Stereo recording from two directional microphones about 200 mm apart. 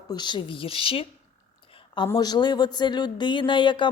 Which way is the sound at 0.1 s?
20° left (ahead or behind).